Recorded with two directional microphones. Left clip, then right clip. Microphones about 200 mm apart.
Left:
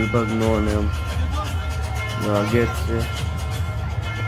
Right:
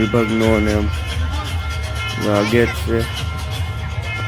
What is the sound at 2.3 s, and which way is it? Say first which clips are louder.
Speech: right 5 dB; 15° right (ahead or behind).